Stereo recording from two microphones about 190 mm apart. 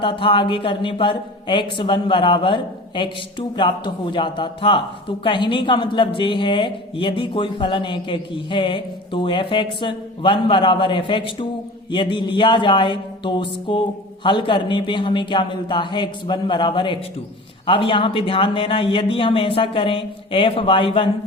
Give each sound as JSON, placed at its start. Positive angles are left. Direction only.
{"t": 0.0, "sound": "speech", "side_deg": 25}